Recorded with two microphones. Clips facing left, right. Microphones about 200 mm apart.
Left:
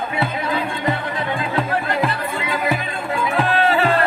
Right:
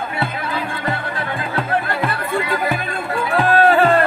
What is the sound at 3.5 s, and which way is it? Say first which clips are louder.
Music: right 6 dB; 45° right (ahead or behind).